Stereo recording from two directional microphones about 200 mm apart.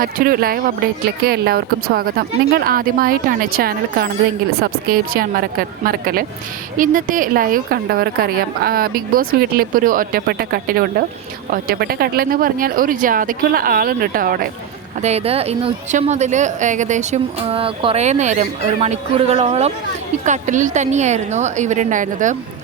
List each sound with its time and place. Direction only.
0.0 s a woman's voice: 45° right (ahead or behind)
15.0 s speech: 30° right (ahead or behind)